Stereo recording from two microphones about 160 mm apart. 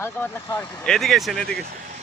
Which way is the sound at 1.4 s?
80° right.